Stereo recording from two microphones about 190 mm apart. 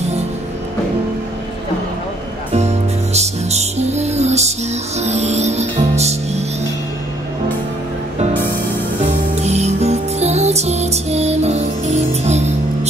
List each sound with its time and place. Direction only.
2.5 s music: 35° right (ahead or behind)
9.3 s music: 35° right (ahead or behind)